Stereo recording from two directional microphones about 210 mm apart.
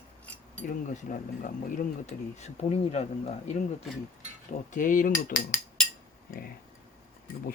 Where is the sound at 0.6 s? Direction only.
35° left (ahead or behind).